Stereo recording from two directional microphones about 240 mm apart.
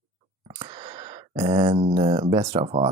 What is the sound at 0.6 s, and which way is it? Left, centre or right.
Speech, centre.